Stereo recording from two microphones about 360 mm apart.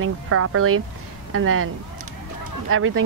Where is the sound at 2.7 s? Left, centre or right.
Right.